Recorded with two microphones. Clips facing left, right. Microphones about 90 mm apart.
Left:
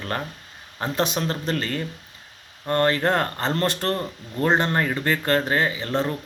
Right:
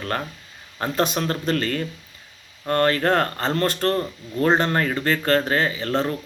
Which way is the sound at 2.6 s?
20° left (ahead or behind).